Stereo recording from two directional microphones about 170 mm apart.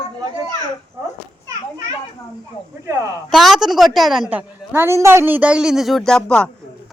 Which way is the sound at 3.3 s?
Centre (ahead or behind).